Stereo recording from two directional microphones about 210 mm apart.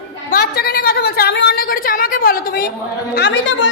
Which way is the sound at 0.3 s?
45° left (ahead or behind).